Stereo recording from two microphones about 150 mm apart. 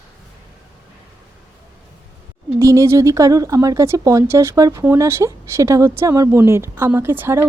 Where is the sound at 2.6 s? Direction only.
20° right (ahead or behind).